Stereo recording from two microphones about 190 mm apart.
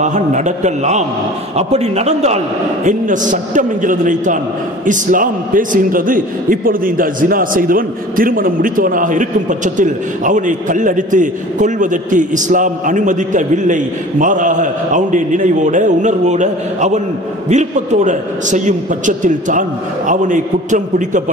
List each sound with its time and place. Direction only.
0.0 s a man's voice: 40° right (ahead or behind)